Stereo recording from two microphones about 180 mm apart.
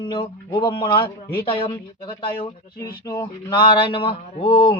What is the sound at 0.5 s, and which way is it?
Mantra, 25° left (ahead or behind).